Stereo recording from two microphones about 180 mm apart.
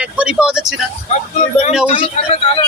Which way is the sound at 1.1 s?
40° left (ahead or behind).